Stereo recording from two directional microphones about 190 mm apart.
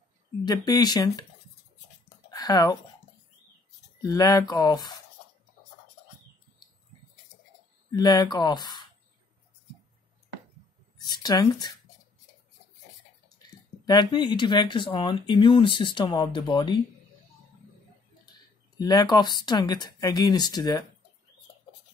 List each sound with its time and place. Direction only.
0.5 s speech: 20° left (ahead or behind)
2.3 s speech: 20° left (ahead or behind)
4.0 s speech: 20° left (ahead or behind)
7.9 s speech: 20° left (ahead or behind)
11.0 s speech: 20° left (ahead or behind)
13.8 s speech: 25° left (ahead or behind)
18.8 s speech: 20° left (ahead or behind)